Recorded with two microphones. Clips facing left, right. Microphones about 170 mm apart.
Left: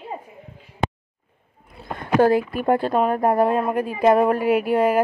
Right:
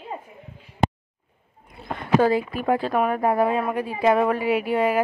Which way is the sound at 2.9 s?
25° left (ahead or behind).